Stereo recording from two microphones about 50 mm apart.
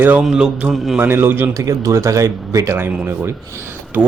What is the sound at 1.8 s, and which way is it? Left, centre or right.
Speech, right.